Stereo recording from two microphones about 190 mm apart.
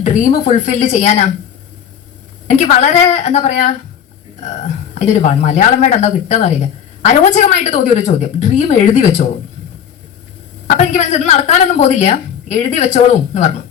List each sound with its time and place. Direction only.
0.0 s a woman's voice: 40° left (ahead or behind)
2.6 s a woman's voice: 35° left (ahead or behind)
4.9 s a woman's voice: 35° left (ahead or behind)
10.7 s a woman's voice: 40° left (ahead or behind)